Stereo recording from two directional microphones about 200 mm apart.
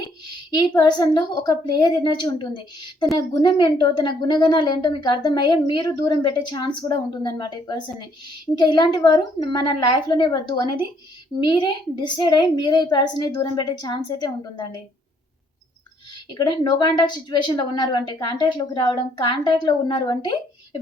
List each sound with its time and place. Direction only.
0.5 s a woman's voice: 20° left (ahead or behind)
16.3 s a woman's voice: 20° left (ahead or behind)